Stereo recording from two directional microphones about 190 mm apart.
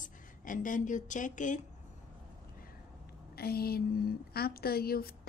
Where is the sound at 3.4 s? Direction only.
55° left (ahead or behind).